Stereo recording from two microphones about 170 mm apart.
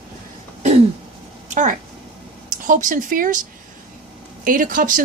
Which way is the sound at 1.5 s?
45° right (ahead or behind).